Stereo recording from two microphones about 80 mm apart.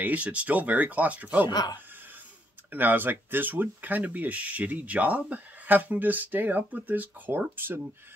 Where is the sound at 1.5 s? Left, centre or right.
Left.